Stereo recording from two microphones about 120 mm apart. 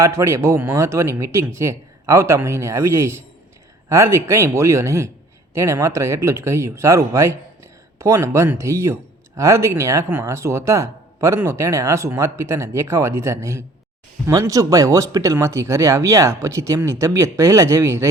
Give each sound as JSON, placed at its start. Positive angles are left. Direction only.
{"t": 0.0, "sound": "speech", "side_deg": -25}